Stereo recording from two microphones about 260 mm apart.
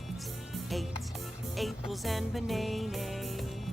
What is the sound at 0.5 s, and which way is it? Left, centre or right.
Music, centre.